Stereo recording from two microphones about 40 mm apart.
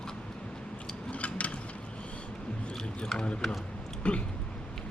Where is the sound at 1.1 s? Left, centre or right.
Left.